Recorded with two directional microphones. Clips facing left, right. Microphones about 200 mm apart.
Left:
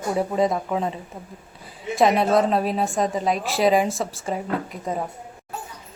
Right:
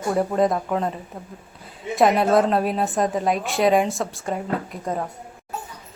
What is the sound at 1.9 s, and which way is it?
A woman's voice, centre (ahead or behind).